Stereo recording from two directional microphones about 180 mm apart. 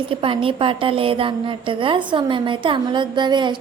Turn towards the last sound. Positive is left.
turn(degrees=-25)  # may be behind; listen again after turning